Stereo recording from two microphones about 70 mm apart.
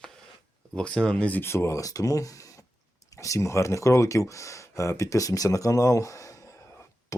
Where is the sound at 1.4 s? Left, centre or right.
Left.